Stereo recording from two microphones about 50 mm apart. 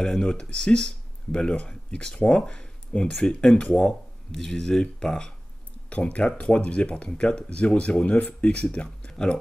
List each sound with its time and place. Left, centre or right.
0.0 s speech: centre
5.9 s speech: left